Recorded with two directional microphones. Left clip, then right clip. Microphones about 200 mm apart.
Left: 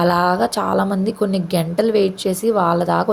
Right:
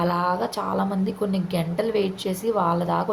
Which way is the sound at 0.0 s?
30° left (ahead or behind).